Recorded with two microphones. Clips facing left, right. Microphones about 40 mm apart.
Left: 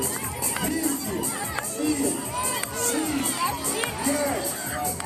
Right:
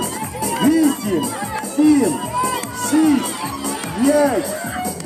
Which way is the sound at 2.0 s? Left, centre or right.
Right.